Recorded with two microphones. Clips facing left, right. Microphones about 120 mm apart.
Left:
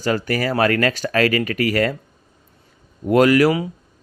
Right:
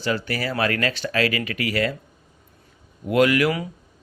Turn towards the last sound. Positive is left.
turn(degrees=40)  # may be behind; listen again after turning